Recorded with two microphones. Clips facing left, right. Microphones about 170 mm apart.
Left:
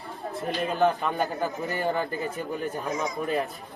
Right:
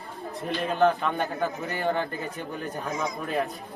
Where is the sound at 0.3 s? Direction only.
Centre (ahead or behind).